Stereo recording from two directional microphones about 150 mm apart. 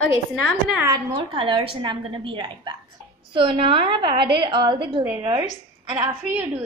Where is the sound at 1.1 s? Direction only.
35° right (ahead or behind).